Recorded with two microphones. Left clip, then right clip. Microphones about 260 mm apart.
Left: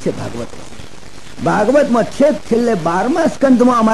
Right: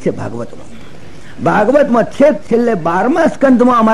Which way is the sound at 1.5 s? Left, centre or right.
Right.